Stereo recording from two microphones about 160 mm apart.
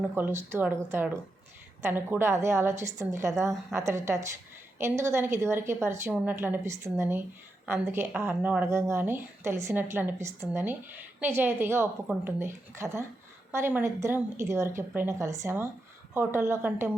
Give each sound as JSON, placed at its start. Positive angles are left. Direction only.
{"t": 0.1, "sound": "speech", "side_deg": -15}